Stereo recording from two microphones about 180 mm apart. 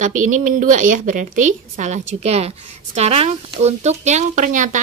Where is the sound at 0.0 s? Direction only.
45° right (ahead or behind).